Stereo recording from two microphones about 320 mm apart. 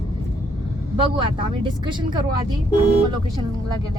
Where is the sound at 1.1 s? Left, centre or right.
Centre.